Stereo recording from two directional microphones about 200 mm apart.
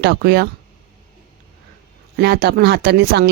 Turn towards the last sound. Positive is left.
turn(degrees=-55)  # may be behind; listen again after turning